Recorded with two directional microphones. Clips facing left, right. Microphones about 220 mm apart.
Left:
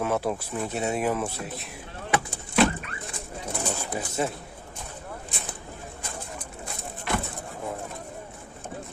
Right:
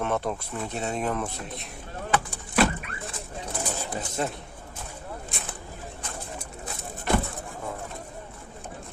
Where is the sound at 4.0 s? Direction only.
5° left (ahead or behind).